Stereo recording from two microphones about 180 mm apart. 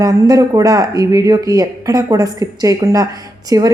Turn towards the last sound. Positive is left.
turn(degrees=-20)  # may be behind; listen again after turning